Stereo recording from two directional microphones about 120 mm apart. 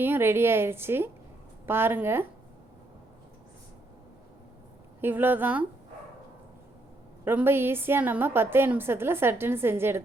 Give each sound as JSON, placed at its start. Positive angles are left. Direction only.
{"t": 0.0, "sound": "a woman's voice", "side_deg": -20}
{"t": 4.9, "sound": "speech", "side_deg": -15}
{"t": 7.3, "sound": "a woman's voice", "side_deg": -20}